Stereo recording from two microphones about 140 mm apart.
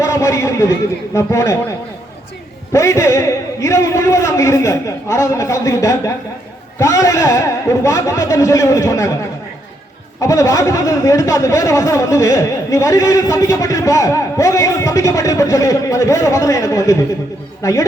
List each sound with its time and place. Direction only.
0.0 s speech: 20° left (ahead or behind)
2.7 s speech: 20° left (ahead or behind)
10.2 s speech: 20° left (ahead or behind)